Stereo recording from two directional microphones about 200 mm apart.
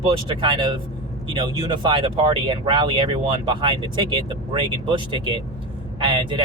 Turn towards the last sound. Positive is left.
turn(degrees=-25)  # may be behind; listen again after turning